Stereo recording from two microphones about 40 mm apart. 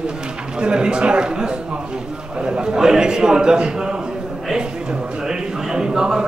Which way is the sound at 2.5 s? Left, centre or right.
Centre.